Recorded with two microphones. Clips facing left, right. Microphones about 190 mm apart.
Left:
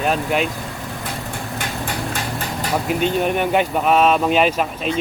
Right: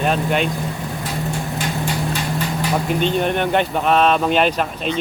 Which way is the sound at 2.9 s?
5° left (ahead or behind).